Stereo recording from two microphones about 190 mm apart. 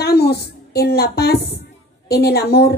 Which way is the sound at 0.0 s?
55° left (ahead or behind).